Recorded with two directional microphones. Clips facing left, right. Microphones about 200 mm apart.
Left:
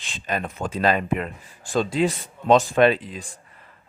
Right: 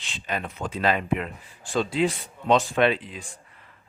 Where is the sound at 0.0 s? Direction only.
45° left (ahead or behind).